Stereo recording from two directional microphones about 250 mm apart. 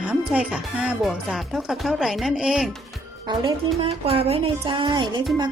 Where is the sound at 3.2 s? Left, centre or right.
Centre.